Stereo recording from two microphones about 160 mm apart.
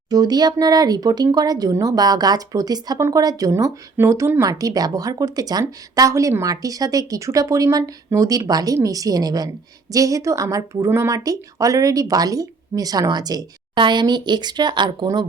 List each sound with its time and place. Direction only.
0.1 s speech: 25° right (ahead or behind)